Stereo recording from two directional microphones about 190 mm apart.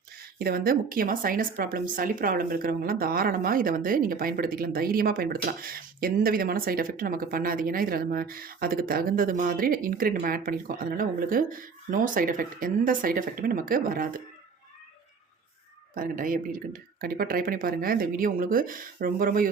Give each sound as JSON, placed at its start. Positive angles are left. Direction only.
{"t": 0.3, "sound": "a woman's voice", "side_deg": -50}
{"t": 16.0, "sound": "a woman's voice", "side_deg": -45}